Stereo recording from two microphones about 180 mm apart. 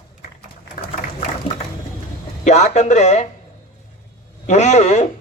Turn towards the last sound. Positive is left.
turn(degrees=40)  # may be behind; listen again after turning